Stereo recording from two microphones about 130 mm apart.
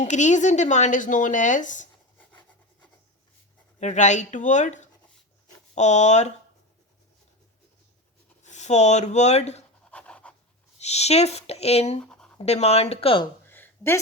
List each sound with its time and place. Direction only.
0.0 s speech: 65° left (ahead or behind)
3.8 s speech: 65° left (ahead or behind)
8.4 s speech: 65° left (ahead or behind)
9.8 s pant: 10° left (ahead or behind)
10.8 s speech: 55° left (ahead or behind)
11.9 s writing: 5° left (ahead or behind)
12.4 s speech: 55° left (ahead or behind)
13.5 s a sound: 15° left (ahead or behind)